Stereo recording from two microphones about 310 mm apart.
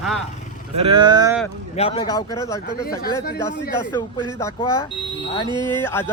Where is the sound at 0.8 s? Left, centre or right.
Centre.